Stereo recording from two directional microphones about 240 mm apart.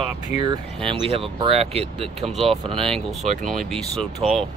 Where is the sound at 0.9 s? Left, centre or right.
Right.